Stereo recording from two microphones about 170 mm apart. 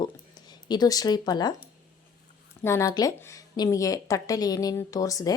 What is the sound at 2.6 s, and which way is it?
A woman's voice, 15° left (ahead or behind).